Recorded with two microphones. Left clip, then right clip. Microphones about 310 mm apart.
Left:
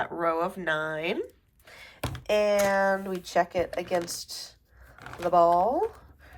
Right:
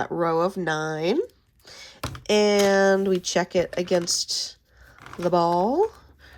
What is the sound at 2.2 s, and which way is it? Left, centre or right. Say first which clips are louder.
Speech: right 4 dB; right.